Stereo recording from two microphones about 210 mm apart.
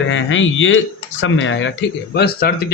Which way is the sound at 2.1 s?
50° left (ahead or behind).